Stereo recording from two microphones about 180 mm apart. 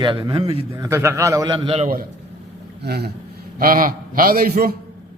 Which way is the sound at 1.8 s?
50° right (ahead or behind).